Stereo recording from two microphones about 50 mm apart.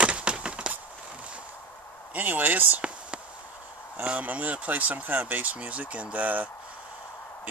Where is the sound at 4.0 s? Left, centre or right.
Right.